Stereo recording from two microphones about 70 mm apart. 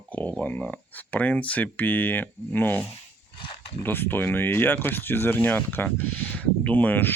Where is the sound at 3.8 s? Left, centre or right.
Left.